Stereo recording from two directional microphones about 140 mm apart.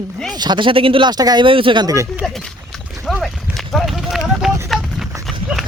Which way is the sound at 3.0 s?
Centre (ahead or behind).